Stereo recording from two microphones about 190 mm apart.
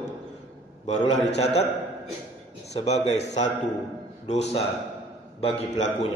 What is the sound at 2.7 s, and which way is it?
Speech, 35° left (ahead or behind).